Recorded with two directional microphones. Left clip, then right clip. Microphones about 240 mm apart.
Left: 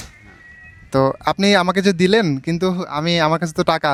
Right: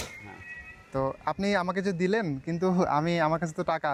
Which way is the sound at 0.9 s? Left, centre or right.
Left.